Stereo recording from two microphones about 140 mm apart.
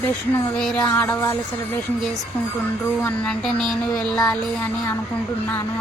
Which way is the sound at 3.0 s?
5° left (ahead or behind).